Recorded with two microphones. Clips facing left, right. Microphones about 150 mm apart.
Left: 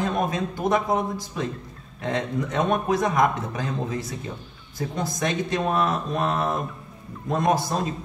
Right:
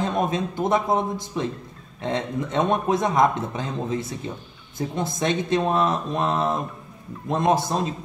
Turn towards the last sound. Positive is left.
turn(degrees=-25)  # may be behind; listen again after turning